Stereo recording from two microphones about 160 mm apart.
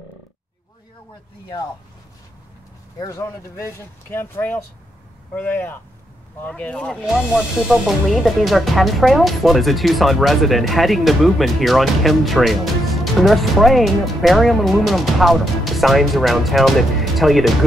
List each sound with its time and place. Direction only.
3.0 s speech: 20° left (ahead or behind)
7.1 s speech: 5° right (ahead or behind)